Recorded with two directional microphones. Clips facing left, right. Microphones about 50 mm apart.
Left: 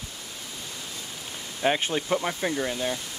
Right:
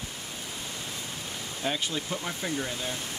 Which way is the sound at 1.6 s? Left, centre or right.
Left.